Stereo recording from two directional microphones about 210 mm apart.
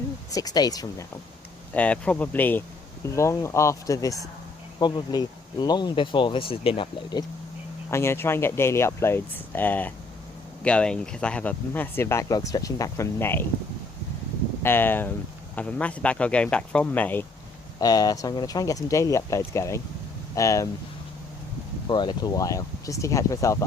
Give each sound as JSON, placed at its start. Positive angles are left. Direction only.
{"t": 0.3, "sound": "speech", "side_deg": 15}
{"t": 1.7, "sound": "speech", "side_deg": 5}
{"t": 14.6, "sound": "speech", "side_deg": 10}
{"t": 21.8, "sound": "speech", "side_deg": 20}